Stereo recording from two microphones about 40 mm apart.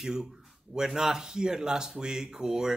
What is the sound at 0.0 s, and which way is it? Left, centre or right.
Speech, centre.